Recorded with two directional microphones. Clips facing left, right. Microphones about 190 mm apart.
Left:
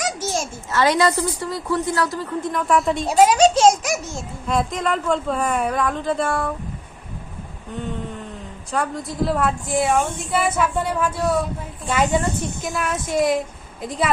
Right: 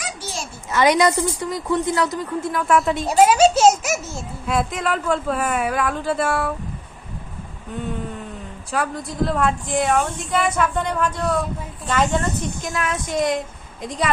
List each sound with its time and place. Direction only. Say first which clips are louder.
0.0 s a sound: left 6 dB; 45° left (ahead or behind)
0.7 s a woman's voice: right 1 dB; 15° right (ahead or behind)
2.4 s a child's voice: right 1 dB; centre (ahead or behind)
8.7 s a child's voice: even; centre (ahead or behind)